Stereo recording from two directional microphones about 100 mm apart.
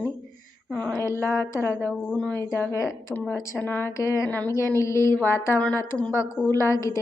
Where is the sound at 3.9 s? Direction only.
30° left (ahead or behind).